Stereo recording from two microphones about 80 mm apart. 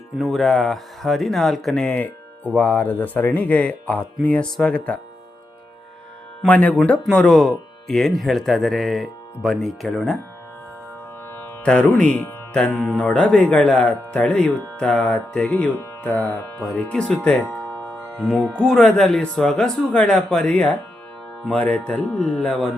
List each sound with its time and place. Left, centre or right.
0.2 s speech: centre
1.9 s music: centre
2.6 s speech: centre
6.5 s speech: centre
7.1 s speech: centre
11.6 s speech: centre
17.0 s music: centre
18.2 s speech: centre